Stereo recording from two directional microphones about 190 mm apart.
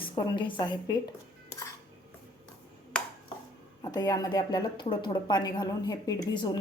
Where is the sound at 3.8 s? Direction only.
20° left (ahead or behind).